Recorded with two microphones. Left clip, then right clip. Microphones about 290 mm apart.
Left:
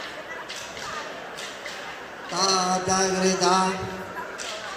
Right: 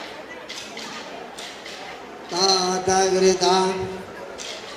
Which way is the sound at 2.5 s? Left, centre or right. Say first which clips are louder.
Right 3 dB; centre.